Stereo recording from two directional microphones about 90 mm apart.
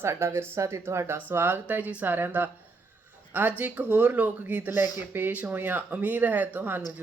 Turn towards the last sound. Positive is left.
turn(degrees=-20)  # may be behind; listen again after turning